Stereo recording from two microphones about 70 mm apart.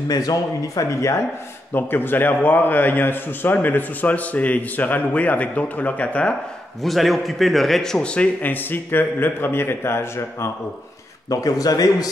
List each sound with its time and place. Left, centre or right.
0.1 s speech: left
1.7 s a man's voice: left
6.8 s a man's voice: centre; by 10.5 s left
11.2 s speech: left